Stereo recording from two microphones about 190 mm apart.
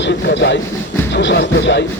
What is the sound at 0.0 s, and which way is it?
Speech, 65° left (ahead or behind).